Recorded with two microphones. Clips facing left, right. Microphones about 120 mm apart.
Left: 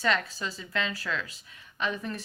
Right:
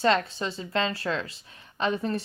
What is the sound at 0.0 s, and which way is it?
Speech, 30° right (ahead or behind).